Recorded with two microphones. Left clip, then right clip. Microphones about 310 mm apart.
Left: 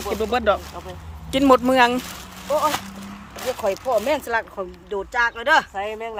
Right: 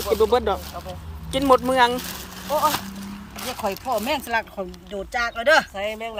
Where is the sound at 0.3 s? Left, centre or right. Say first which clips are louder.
Left 2 dB; centre.